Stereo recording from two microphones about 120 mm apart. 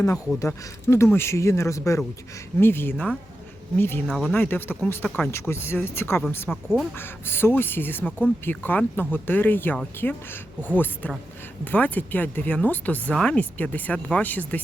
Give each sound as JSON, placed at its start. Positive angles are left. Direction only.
{"t": 0.3, "sound": "speech", "side_deg": 25}
{"t": 4.0, "sound": "speech", "side_deg": 5}
{"t": 4.4, "sound": "speech", "side_deg": 15}
{"t": 5.0, "sound": "speech", "side_deg": 5}
{"t": 5.3, "sound": "speech", "side_deg": 20}
{"t": 6.5, "sound": "speech", "side_deg": -5}
{"t": 6.9, "sound": "speech", "side_deg": 20}